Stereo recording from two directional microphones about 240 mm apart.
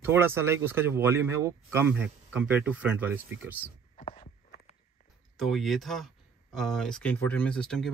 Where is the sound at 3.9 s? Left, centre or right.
Left.